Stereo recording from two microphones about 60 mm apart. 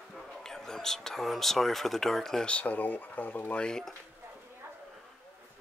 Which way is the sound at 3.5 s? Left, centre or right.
Centre.